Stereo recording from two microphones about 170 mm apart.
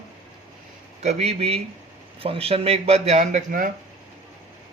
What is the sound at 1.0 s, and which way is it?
Speech, 40° right (ahead or behind).